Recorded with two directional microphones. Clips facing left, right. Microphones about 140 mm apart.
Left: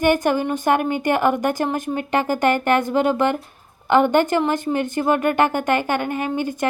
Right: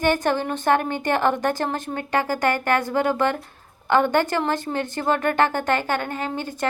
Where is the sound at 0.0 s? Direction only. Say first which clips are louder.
Left 3 dB; 15° left (ahead or behind).